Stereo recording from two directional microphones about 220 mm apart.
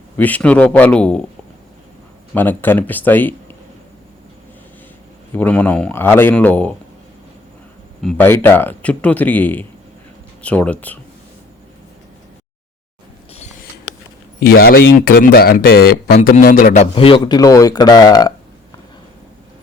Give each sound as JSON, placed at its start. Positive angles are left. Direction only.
{"t": 0.2, "sound": "speech", "side_deg": 5}
{"t": 2.3, "sound": "speech", "side_deg": 10}
{"t": 5.3, "sound": "speech", "side_deg": 5}
{"t": 8.0, "sound": "speech", "side_deg": 10}
{"t": 14.5, "sound": "speech", "side_deg": 45}
{"t": 16.7, "sound": "speech", "side_deg": 25}